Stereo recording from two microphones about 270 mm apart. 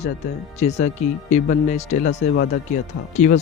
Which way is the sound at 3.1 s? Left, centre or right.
Left.